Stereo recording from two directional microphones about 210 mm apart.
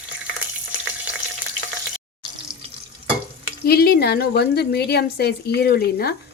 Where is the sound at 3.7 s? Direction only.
45° left (ahead or behind).